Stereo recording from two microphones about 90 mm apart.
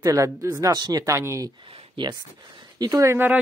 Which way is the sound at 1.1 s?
35° right (ahead or behind).